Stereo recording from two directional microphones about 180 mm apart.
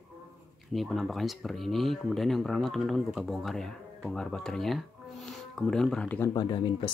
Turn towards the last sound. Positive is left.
turn(degrees=25)  # may be behind; listen again after turning